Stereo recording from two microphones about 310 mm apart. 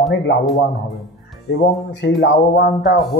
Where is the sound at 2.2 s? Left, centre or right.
Left.